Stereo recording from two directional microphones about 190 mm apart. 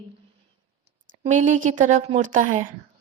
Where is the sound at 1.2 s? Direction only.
40° right (ahead or behind).